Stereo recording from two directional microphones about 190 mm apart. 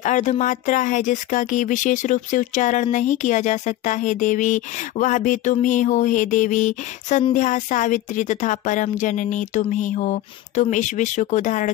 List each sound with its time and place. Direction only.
0.0 s speech: 40° left (ahead or behind)